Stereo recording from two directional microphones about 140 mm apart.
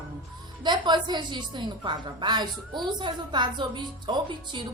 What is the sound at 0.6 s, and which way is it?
A woman's voice, 30° right (ahead or behind).